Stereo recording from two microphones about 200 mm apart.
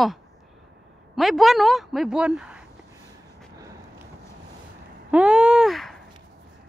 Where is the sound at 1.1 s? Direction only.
Centre (ahead or behind).